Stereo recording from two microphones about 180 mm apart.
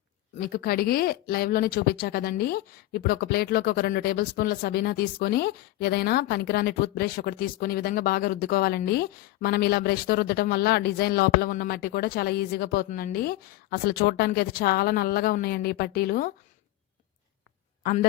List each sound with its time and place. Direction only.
0.3 s speech: 55° left (ahead or behind)